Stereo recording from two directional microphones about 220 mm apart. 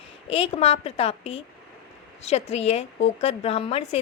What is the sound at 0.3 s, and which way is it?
A woman's voice, 25° left (ahead or behind).